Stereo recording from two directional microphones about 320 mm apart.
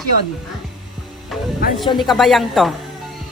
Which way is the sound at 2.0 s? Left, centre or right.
Centre.